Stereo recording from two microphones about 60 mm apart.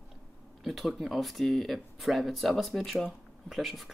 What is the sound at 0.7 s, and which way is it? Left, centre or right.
Speech, centre.